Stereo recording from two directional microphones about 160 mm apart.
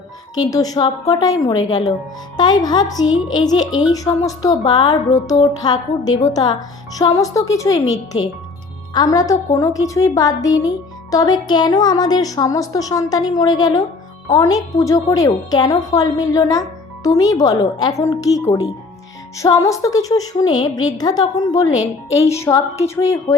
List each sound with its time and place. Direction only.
0.3 s a woman's voice: 25° left (ahead or behind)
19.5 s a woman's voice: 20° left (ahead or behind)